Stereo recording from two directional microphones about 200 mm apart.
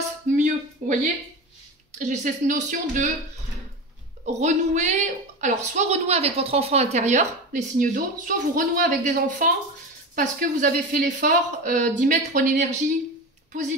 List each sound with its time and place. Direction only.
0.4 s a sound: 35° right (ahead or behind)
2.0 s a woman's voice: 40° right (ahead or behind)
4.2 s a woman's voice: 35° right (ahead or behind)